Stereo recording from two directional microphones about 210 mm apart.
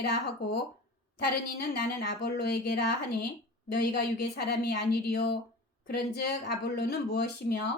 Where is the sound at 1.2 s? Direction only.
45° left (ahead or behind).